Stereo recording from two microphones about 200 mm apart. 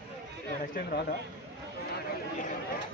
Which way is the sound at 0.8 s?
45° left (ahead or behind).